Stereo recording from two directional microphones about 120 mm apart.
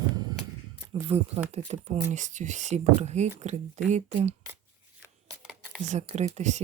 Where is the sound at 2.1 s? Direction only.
90° right; by 4.4 s 70° right (ahead or behind).